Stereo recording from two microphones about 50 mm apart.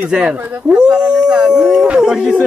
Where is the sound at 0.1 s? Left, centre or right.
Centre.